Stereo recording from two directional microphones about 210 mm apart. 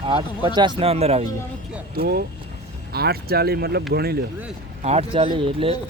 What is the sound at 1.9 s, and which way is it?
Speech, 45° right (ahead or behind).